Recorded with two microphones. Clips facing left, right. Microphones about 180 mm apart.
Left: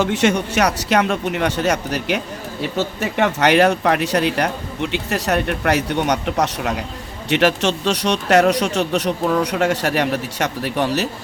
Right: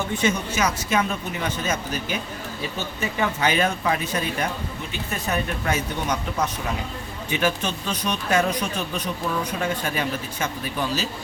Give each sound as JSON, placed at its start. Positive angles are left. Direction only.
{"t": 0.0, "sound": "speech", "side_deg": 80}